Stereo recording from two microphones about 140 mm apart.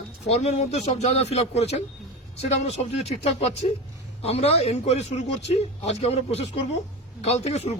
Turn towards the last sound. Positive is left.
turn(degrees=50)  # may be behind; listen again after turning